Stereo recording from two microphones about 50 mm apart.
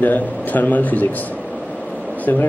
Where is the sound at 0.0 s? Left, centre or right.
Left.